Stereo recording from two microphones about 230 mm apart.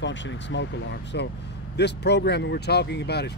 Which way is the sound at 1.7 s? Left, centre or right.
Left.